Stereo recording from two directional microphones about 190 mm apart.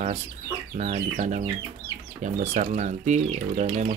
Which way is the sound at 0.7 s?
40° right (ahead or behind).